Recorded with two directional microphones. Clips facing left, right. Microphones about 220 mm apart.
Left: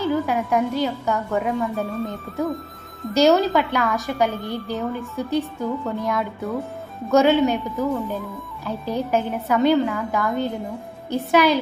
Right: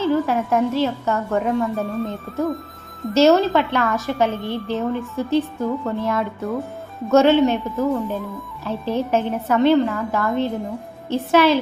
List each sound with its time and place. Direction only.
0.0 s a woman's voice: centre (ahead or behind)